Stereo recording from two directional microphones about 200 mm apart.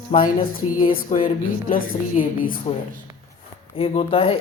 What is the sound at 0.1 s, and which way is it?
Speech, 25° left (ahead or behind).